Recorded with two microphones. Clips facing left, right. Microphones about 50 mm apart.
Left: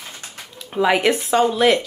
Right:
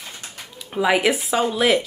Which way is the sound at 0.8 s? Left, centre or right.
Centre.